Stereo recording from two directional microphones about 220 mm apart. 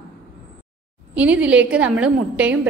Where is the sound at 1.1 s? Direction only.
5° right (ahead or behind).